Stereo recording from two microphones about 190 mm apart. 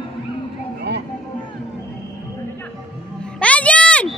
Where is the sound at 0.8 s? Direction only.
60° right (ahead or behind).